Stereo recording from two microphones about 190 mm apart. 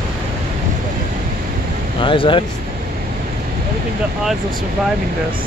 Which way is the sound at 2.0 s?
25° left (ahead or behind).